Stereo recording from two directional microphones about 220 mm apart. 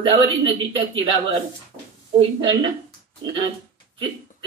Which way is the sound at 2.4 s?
20° right (ahead or behind).